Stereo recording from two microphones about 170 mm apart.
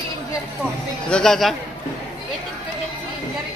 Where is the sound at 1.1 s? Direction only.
Centre (ahead or behind).